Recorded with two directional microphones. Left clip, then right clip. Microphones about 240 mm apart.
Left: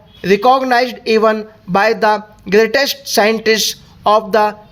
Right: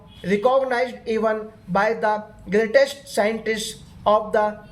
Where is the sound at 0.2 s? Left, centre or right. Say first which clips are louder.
Left 8 dB; left.